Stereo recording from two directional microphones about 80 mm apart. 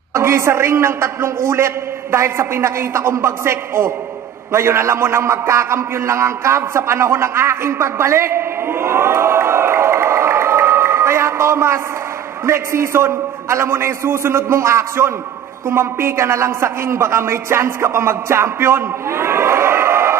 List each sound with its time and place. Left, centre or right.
0.1 s a man's voice: right